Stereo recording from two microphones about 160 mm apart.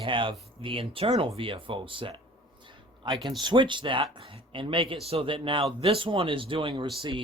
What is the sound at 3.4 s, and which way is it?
Speech, 30° right (ahead or behind).